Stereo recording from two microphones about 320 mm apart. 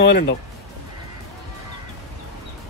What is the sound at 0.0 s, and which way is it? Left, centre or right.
Speech, left.